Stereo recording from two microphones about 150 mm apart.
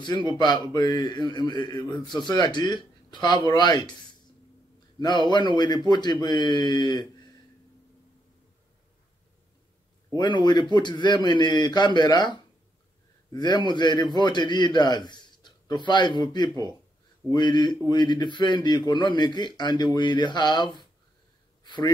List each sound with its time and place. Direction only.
0.0 s a man's voice: 30° left (ahead or behind)
5.0 s a man's voice: 30° left (ahead or behind)
10.1 s a man's voice: 30° left (ahead or behind)